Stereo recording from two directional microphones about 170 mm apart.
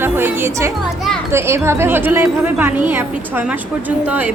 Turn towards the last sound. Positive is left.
turn(degrees=-10)  # may be behind; listen again after turning